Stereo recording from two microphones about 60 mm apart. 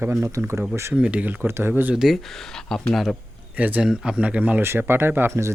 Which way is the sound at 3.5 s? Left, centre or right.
Right.